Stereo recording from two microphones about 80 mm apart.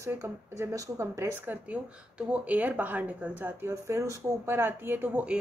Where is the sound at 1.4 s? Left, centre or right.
Centre.